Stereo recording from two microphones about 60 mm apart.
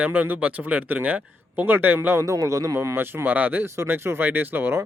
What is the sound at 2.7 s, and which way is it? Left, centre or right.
A man's voice, right.